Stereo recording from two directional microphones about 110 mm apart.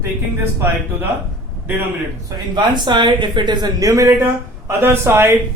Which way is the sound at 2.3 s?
40° right (ahead or behind).